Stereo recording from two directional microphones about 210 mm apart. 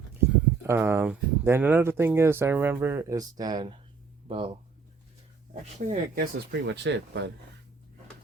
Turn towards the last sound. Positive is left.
turn(degrees=-55)  # may be behind; listen again after turning